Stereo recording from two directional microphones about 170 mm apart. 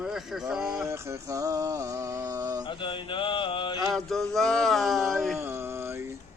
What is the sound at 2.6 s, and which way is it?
Mantra, 30° left (ahead or behind).